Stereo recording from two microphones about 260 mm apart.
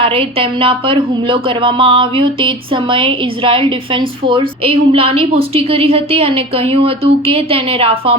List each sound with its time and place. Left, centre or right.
0.0 s a woman's voice: right